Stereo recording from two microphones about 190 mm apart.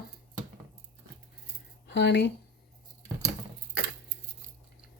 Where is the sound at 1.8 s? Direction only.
65° left (ahead or behind).